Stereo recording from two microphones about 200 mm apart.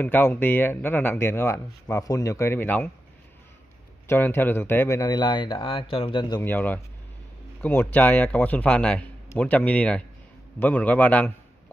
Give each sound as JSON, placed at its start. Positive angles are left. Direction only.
{"t": 0.0, "sound": "speech", "side_deg": 10}
{"t": 4.1, "sound": "speech", "side_deg": 10}
{"t": 6.4, "sound": "speech", "side_deg": 10}